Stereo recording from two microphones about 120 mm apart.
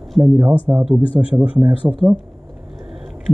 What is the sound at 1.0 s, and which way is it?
Speech, 50° left (ahead or behind).